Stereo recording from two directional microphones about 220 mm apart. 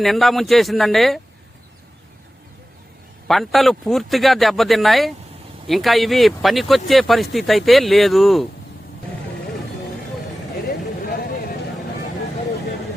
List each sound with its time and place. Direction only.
0.0 s speech: centre (ahead or behind)
3.2 s speech: centre (ahead or behind)
10.7 s vehicle: 45° left (ahead or behind)